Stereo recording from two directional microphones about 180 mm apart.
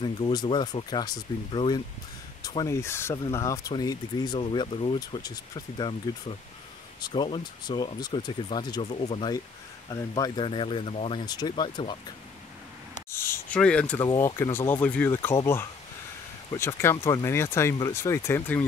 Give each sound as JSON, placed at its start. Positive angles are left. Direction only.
{"t": 0.0, "sound": "speech", "side_deg": 25}
{"t": 9.8, "sound": "speech", "side_deg": 20}
{"t": 13.1, "sound": "a sound", "side_deg": 15}
{"t": 14.0, "sound": "speech", "side_deg": 20}
{"t": 16.5, "sound": "speech", "side_deg": 15}